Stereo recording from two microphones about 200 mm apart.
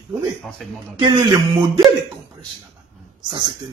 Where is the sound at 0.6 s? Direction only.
Centre (ahead or behind).